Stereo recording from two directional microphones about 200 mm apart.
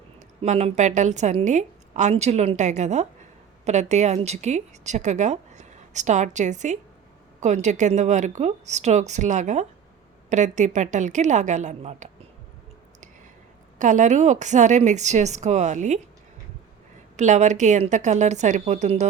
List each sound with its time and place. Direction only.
0.4 s a woman's voice: 35° right (ahead or behind)
13.7 s a woman's voice: 40° right (ahead or behind)
17.2 s a woman's voice: 35° right (ahead or behind)